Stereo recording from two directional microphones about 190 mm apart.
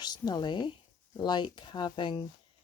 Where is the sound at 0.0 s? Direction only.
20° left (ahead or behind).